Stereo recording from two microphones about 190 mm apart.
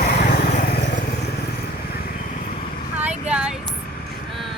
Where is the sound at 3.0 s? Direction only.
5° right (ahead or behind).